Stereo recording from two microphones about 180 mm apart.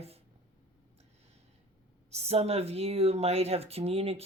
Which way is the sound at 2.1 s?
35° right (ahead or behind).